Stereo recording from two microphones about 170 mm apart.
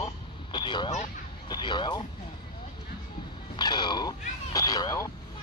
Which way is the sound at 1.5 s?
25° left (ahead or behind).